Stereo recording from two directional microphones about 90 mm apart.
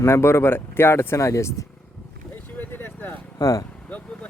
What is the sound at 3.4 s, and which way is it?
Speech, 40° left (ahead or behind).